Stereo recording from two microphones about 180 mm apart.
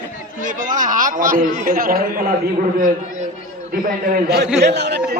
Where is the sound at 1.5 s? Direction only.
50° right (ahead or behind).